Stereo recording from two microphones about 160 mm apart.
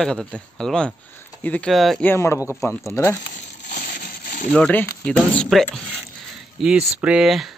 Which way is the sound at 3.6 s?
55° left (ahead or behind).